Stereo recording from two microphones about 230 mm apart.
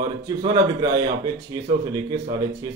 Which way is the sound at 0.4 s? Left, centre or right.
Right.